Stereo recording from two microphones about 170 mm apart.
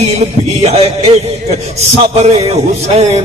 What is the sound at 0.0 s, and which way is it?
Speech, 40° right (ahead or behind).